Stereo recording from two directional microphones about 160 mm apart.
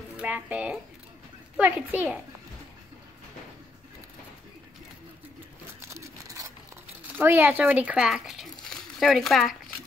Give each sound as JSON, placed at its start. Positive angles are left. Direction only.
{"t": 0.2, "sound": "a child's voice", "side_deg": -10}
{"t": 5.8, "sound": "a sound", "side_deg": -15}
{"t": 7.2, "sound": "speech", "side_deg": -15}